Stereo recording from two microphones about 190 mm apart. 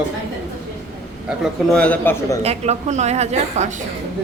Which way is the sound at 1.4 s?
5° left (ahead or behind).